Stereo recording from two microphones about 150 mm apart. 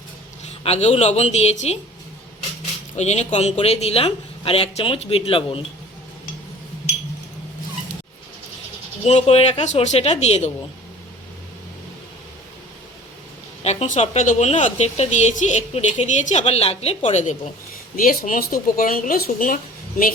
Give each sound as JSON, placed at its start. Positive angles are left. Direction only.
{"t": 0.6, "sound": "a woman's voice", "side_deg": 45}
{"t": 2.9, "sound": "speech", "side_deg": 50}
{"t": 9.0, "sound": "a woman's voice", "side_deg": 45}
{"t": 13.7, "sound": "a woman's voice", "side_deg": 50}
{"t": 17.9, "sound": "speech", "side_deg": 70}